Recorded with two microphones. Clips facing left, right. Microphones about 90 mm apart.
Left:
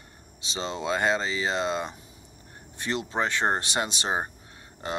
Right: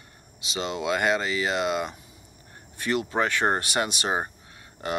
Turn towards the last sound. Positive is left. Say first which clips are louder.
# right 3 dB
turn(degrees=30)  # may be behind; listen again after turning